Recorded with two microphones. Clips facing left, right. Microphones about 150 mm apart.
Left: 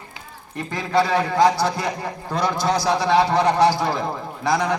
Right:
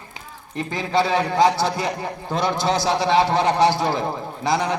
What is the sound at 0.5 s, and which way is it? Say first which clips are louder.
A man's voice: left 1 dB; 25° right (ahead or behind).